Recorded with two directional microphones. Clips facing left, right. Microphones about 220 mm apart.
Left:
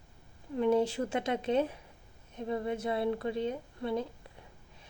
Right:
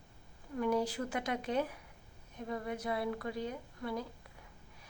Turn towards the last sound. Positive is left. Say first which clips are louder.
# left 6 dB
turn(degrees=25)  # may be behind; listen again after turning